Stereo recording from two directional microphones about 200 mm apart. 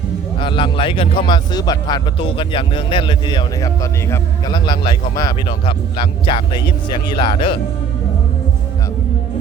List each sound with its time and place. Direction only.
0.3 s a man's voice: 25° left (ahead or behind)